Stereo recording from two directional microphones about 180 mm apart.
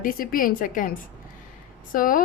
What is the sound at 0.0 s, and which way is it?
Speech, 50° left (ahead or behind).